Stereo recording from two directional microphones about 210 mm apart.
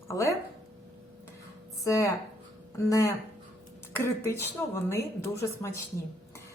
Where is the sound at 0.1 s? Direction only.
15° left (ahead or behind).